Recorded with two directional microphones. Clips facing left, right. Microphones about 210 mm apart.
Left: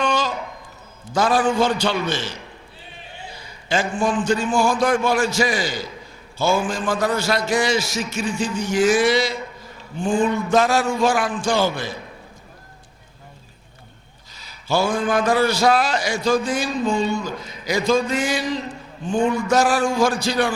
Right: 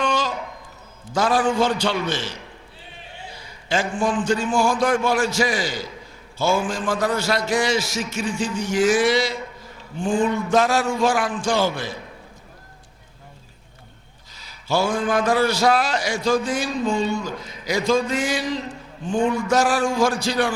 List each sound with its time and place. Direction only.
0.0 s a sound: 15° left (ahead or behind)
1.1 s a man's voice: 15° left (ahead or behind)
3.7 s a man's voice: 15° left (ahead or behind)
14.8 s a man's voice: 15° left (ahead or behind)
17.7 s a man's voice: 15° left (ahead or behind)